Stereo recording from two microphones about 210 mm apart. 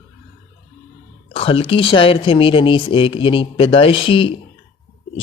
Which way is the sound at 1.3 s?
25° left (ahead or behind).